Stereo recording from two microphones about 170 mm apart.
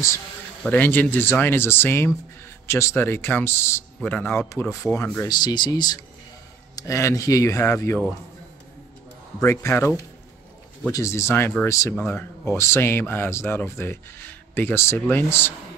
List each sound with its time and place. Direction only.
0.7 s speech: 10° left (ahead or behind)
5.3 s speech: 25° left (ahead or behind)
9.4 s speech: 15° left (ahead or behind)